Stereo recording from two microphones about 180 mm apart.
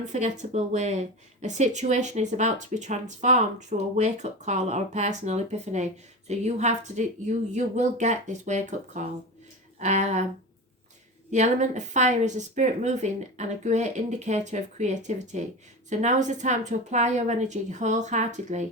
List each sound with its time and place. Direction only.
0.0 s speech: 40° right (ahead or behind)
11.3 s speech: 40° right (ahead or behind)